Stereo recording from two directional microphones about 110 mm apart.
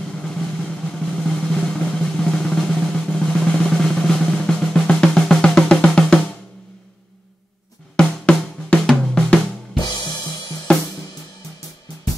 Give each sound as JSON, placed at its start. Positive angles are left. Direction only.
{"t": 0.1, "sound": "drum", "side_deg": 5}
{"t": 7.9, "sound": "drum", "side_deg": 10}
{"t": 9.8, "sound": "drum kit", "side_deg": 40}